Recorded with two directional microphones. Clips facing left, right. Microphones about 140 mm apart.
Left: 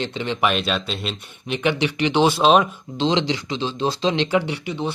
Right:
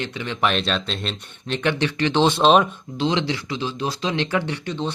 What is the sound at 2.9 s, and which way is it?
Speech, 25° left (ahead or behind).